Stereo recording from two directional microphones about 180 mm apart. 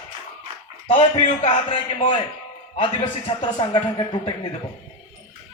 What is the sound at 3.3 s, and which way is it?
A man's voice, 25° left (ahead or behind).